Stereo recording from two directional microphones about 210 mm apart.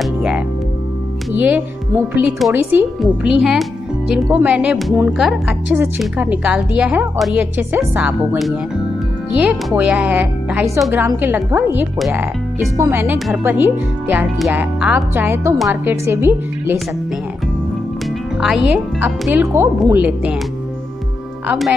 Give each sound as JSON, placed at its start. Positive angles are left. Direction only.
{"t": 0.0, "sound": "music", "side_deg": -5}
{"t": 1.3, "sound": "a woman's voice", "side_deg": -10}
{"t": 18.4, "sound": "speech", "side_deg": -5}
{"t": 21.5, "sound": "a woman's voice", "side_deg": 0}